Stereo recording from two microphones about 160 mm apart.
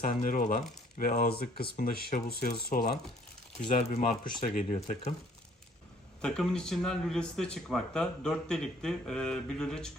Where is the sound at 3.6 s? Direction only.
50° left (ahead or behind).